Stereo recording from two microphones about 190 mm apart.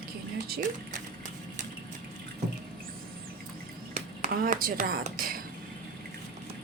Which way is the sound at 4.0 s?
45° right (ahead or behind).